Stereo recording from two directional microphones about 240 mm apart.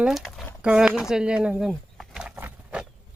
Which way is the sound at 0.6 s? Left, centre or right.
Centre.